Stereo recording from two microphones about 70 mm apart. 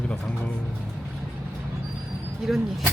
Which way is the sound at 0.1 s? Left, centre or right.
Centre.